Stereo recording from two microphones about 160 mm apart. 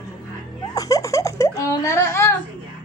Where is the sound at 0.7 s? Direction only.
20° left (ahead or behind).